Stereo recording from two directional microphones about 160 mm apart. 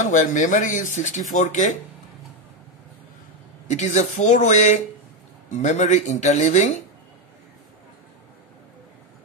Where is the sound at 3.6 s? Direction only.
45° left (ahead or behind).